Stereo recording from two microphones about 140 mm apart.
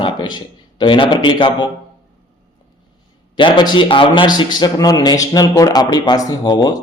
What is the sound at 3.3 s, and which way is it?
A man's voice, 35° left (ahead or behind).